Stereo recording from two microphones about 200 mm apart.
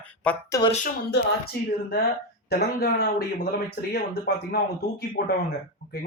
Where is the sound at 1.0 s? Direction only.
55° left (ahead or behind).